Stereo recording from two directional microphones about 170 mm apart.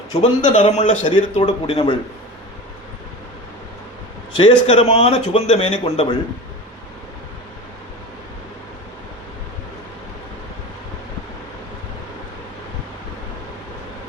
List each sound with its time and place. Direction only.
0.2 s a man's voice: 40° left (ahead or behind)
4.4 s speech: 35° left (ahead or behind)